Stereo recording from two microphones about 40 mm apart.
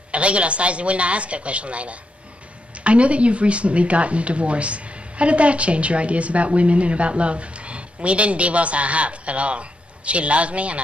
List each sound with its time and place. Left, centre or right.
0.1 s speech: right